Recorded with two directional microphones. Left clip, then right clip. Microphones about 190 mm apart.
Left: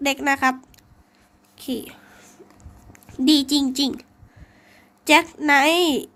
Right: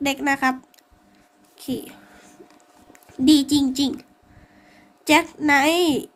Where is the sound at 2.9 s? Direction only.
10° left (ahead or behind).